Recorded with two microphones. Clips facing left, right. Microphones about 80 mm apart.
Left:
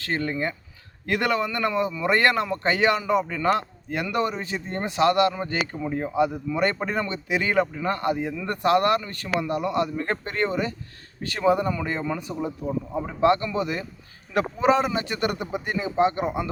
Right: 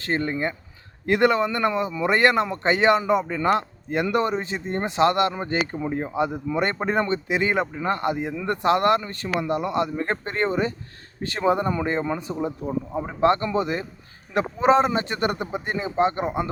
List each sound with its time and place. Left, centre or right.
0.0 s speech: right
13.2 s speech: right